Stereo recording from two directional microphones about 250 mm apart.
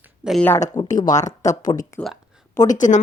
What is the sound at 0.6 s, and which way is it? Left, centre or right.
Speech, left.